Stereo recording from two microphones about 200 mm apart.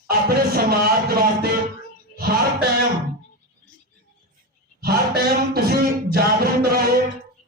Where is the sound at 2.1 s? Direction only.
50° right (ahead or behind).